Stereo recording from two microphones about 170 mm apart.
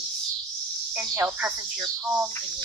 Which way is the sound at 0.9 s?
10° right (ahead or behind).